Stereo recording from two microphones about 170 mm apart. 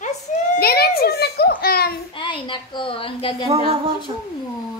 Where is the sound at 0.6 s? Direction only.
65° left (ahead or behind).